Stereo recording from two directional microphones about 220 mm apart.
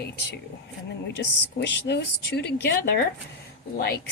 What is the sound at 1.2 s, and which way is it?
Speech, 50° left (ahead or behind).